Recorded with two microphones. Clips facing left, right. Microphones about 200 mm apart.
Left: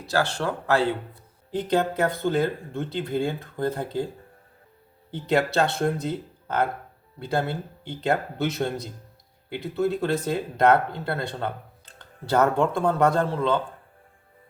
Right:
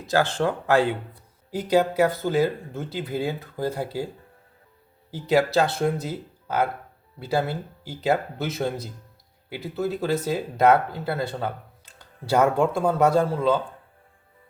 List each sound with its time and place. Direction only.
0.0 s speech: 15° right (ahead or behind)
5.1 s speech: 5° right (ahead or behind)